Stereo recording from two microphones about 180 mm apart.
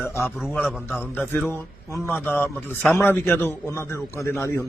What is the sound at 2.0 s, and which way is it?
Speech, 10° left (ahead or behind).